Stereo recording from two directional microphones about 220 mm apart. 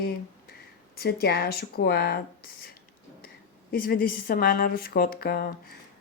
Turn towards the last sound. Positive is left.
turn(degrees=45)  # may be behind; listen again after turning